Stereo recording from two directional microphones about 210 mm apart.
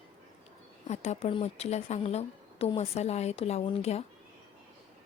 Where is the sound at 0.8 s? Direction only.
30° left (ahead or behind).